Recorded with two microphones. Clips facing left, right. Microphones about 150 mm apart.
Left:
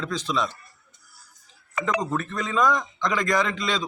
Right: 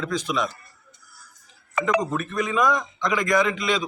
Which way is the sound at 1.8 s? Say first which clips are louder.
Right 2 dB; 15° right (ahead or behind).